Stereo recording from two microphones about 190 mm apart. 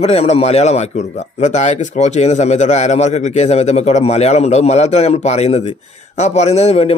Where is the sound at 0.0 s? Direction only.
35° left (ahead or behind).